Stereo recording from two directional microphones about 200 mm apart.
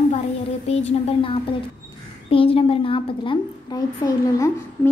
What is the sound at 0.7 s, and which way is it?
A woman's voice, 30° left (ahead or behind).